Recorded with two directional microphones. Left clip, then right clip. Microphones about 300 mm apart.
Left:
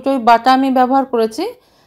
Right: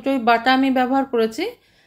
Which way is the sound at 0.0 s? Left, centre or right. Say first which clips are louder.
Left 6 dB; centre.